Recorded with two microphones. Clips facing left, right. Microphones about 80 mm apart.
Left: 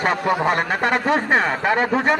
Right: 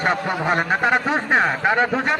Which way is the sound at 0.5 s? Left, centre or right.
Left.